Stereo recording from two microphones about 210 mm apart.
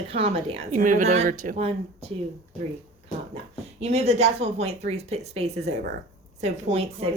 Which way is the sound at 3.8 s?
30° right (ahead or behind).